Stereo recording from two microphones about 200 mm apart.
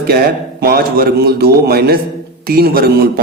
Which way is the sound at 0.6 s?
50° right (ahead or behind).